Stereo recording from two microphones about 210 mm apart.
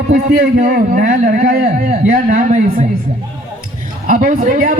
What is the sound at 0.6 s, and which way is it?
A man's voice, 40° right (ahead or behind).